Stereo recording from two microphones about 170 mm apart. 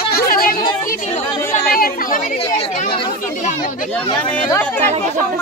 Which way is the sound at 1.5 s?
55° left (ahead or behind).